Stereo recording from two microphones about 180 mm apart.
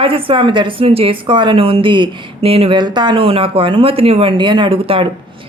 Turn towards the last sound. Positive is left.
turn(degrees=-30)  # may be behind; listen again after turning